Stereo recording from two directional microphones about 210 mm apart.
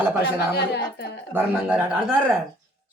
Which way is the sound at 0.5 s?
50° left (ahead or behind).